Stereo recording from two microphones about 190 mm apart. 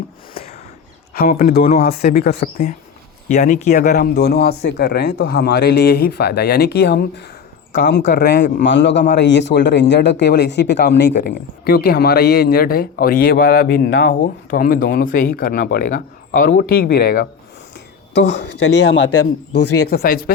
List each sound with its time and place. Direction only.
1.1 s speech: 55° left (ahead or behind)
3.2 s speech: 40° left (ahead or behind)
3.9 s speech: 55° left (ahead or behind)
8.0 s speech: 50° left (ahead or behind)
8.6 s a man's voice: 70° left (ahead or behind)
14.1 s speech: 45° left (ahead or behind)
18.1 s a man's voice: 65° left (ahead or behind)
19.7 s speech: 55° left (ahead or behind)